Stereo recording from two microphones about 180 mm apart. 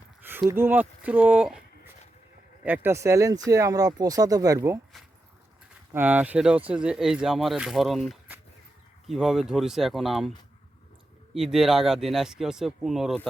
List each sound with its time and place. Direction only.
0.2 s a sound: 10° right (ahead or behind)
0.5 s speech: 10° right (ahead or behind)
5.9 s speech: 10° right (ahead or behind)
11.3 s speech: centre (ahead or behind)